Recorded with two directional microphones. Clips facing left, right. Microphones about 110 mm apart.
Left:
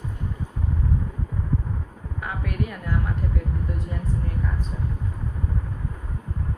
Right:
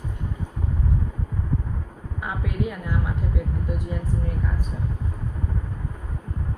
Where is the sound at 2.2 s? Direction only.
20° right (ahead or behind).